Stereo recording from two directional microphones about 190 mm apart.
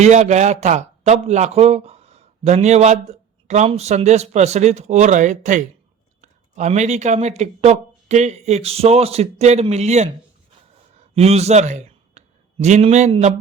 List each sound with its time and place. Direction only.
0.0 s speech: 35° right (ahead or behind)